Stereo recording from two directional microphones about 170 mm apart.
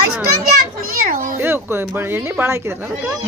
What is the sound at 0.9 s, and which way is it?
Children playing, 55° right (ahead or behind).